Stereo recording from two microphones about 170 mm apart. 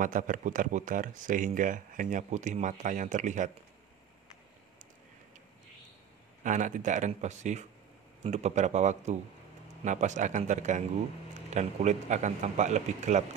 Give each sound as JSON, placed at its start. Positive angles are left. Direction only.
{"t": 0.0, "sound": "speech", "side_deg": -50}
{"t": 6.4, "sound": "speech", "side_deg": -45}